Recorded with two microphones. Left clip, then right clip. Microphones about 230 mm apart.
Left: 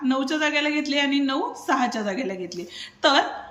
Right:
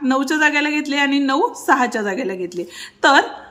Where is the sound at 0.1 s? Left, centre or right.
Centre.